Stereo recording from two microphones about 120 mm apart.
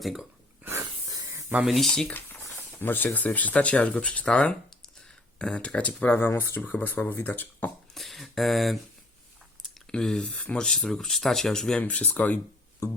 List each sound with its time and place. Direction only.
0.0 s speech: centre (ahead or behind)
0.6 s a sound: 20° right (ahead or behind)
1.5 s speech: centre (ahead or behind)
2.7 s speech: 15° left (ahead or behind)
7.9 s speech: centre (ahead or behind)